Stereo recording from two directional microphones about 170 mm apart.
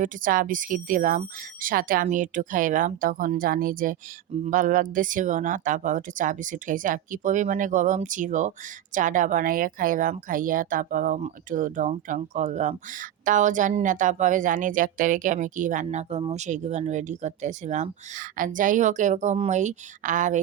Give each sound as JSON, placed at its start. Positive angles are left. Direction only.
{"t": 0.0, "sound": "speech", "side_deg": -50}